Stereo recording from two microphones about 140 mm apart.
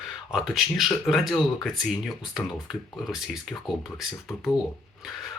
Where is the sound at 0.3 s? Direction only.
Centre (ahead or behind).